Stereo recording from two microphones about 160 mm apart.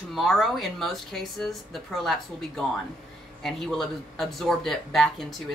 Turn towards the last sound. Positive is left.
turn(degrees=0)  # may be behind; listen again after turning